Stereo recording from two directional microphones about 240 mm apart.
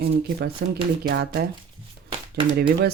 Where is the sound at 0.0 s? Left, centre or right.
Right.